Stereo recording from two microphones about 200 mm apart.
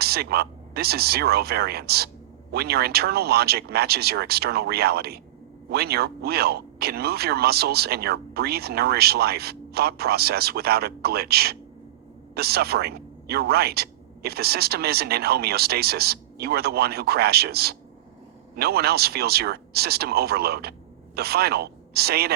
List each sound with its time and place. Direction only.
0.0 s speech: 50° right (ahead or behind)